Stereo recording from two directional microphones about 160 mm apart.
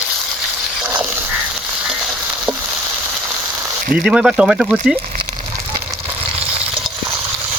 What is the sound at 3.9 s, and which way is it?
Speech, 5° right (ahead or behind).